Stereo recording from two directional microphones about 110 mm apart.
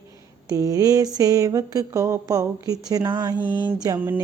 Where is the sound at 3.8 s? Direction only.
30° right (ahead or behind).